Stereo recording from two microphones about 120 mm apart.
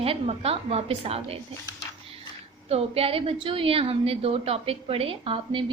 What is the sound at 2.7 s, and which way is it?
A woman's voice, 55° right (ahead or behind).